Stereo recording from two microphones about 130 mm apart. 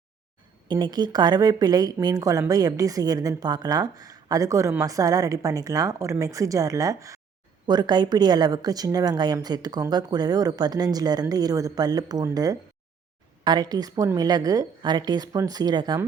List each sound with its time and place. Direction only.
0.7 s speech: 35° right (ahead or behind)